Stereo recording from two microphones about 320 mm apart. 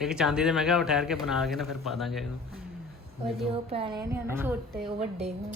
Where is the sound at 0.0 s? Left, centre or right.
Centre.